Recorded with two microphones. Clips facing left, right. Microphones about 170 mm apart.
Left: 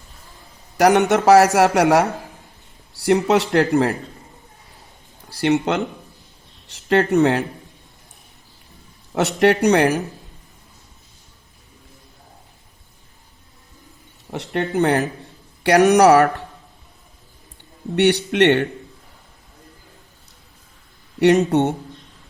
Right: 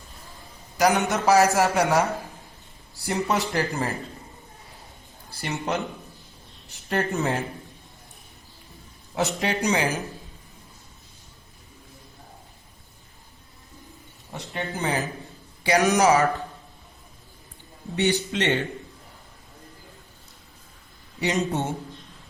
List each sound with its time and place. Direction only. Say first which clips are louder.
0.8 s speech: left 7 dB; 70° left (ahead or behind)
5.3 s speech: left 14 dB; 75° left (ahead or behind)
6.7 s speech: left 9 dB; 75° left (ahead or behind)
9.1 s speech: left 9 dB; 70° left (ahead or behind)
14.3 s speech: left 11 dB; 65° left (ahead or behind)
17.9 s speech: left 7 dB; 70° left (ahead or behind)
21.2 s speech: left 11 dB; 65° left (ahead or behind)